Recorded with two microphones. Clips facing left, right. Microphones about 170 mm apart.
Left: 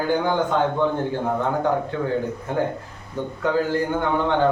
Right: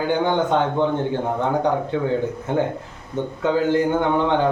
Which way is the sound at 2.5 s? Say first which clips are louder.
Right 2 dB; 25° right (ahead or behind).